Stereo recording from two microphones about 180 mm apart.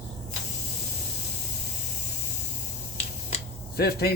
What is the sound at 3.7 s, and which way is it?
Speech, 60° left (ahead or behind).